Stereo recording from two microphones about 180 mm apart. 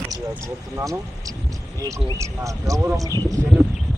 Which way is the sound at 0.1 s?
15° right (ahead or behind).